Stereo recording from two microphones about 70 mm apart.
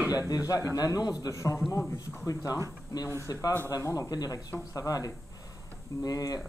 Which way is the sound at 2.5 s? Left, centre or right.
Left.